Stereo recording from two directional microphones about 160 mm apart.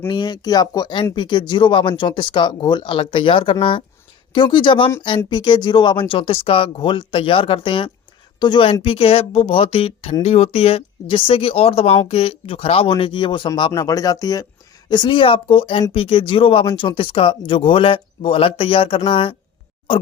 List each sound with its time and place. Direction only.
0.1 s speech: 25° left (ahead or behind)